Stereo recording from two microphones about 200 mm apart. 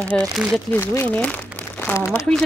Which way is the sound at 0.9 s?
10° left (ahead or behind).